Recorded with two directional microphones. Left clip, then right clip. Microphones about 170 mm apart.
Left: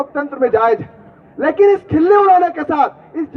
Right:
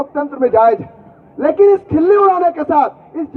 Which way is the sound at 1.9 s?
35° right (ahead or behind).